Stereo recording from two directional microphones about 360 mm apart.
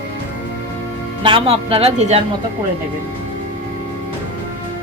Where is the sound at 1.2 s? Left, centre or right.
Centre.